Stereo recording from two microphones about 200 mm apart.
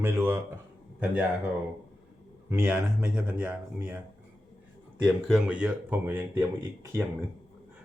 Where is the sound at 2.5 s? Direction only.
10° right (ahead or behind).